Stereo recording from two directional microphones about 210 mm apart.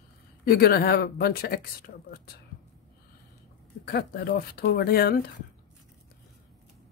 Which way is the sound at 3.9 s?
45° left (ahead or behind).